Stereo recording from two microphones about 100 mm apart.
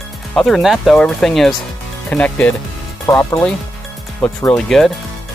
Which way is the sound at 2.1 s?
15° left (ahead or behind).